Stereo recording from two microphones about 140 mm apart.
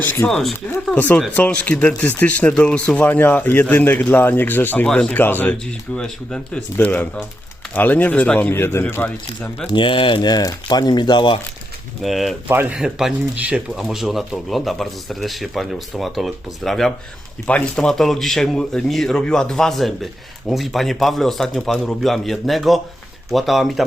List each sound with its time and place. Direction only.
0.0 s a man's voice: 15° left (ahead or behind)
0.3 s a man's voice: 5° left (ahead or behind)
9.6 s speech: 35° left (ahead or behind)
12.0 s speech: centre (ahead or behind)
12.5 s speech: 10° right (ahead or behind)